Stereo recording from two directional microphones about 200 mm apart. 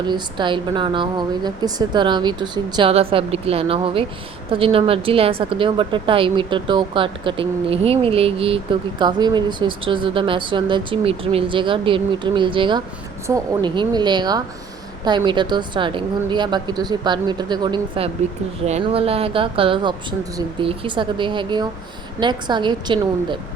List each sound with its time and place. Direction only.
0.1 s a woman's voice: 25° right (ahead or behind)